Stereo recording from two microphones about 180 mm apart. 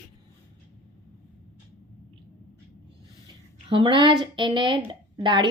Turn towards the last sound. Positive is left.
turn(degrees=-25)  # may be behind; listen again after turning